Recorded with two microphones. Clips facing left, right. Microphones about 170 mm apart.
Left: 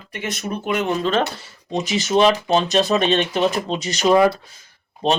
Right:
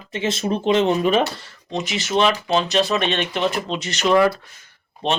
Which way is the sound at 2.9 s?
35° left (ahead or behind).